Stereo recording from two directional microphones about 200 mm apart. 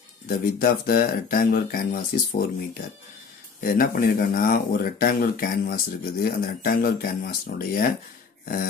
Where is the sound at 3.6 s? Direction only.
45° left (ahead or behind).